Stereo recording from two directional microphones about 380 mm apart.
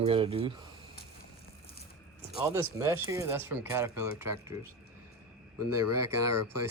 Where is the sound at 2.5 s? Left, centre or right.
Centre.